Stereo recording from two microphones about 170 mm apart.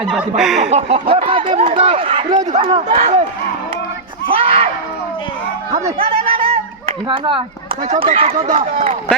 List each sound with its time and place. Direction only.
0.0 s speech: centre (ahead or behind)
0.6 s speech: 40° right (ahead or behind)
3.0 s speech: 45° right (ahead or behind)
4.3 s speech: 35° right (ahead or behind)
5.7 s a sound: 35° right (ahead or behind)
7.9 s speech: 35° right (ahead or behind)